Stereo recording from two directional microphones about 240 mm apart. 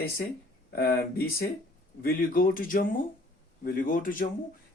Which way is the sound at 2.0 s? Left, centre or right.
Left.